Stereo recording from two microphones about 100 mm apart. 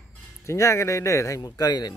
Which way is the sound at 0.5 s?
30° left (ahead or behind).